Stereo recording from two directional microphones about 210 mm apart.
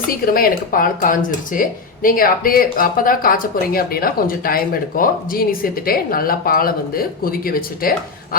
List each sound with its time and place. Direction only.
0.1 s speech: 45° left (ahead or behind)